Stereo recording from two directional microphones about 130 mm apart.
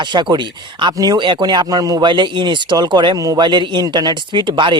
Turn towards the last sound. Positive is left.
turn(degrees=-35)  # may be behind; listen again after turning